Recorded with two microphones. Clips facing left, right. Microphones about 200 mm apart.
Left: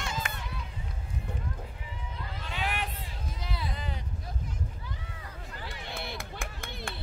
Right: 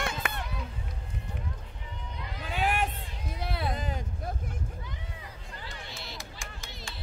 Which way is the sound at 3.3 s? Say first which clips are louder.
Right 6 dB; 60° right (ahead or behind).